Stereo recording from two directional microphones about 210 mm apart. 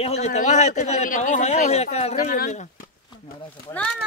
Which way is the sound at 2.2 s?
40° left (ahead or behind).